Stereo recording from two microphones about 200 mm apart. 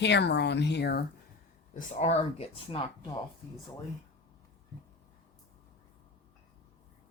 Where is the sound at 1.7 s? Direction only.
35° left (ahead or behind).